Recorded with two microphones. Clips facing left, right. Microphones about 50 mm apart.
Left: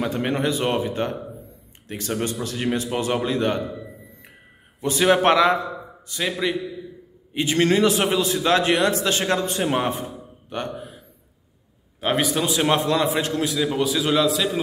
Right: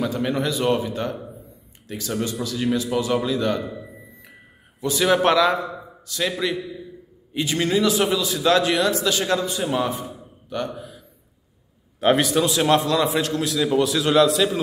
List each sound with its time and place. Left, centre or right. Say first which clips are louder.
0.0 s a man's voice: even; left
4.7 s a man's voice: left 1 dB; left
7.3 s a man's voice: left 2 dB; left
12.2 s a man's voice: right 2 dB; centre
12.7 s a man's voice: right 1 dB; left; by 14.6 s centre